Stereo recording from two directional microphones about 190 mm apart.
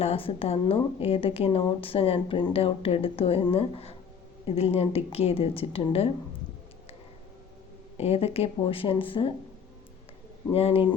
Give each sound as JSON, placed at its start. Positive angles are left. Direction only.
{"t": 0.0, "sound": "a woman's voice", "side_deg": 30}
{"t": 7.9, "sound": "speech", "side_deg": 30}
{"t": 10.5, "sound": "a woman's voice", "side_deg": 30}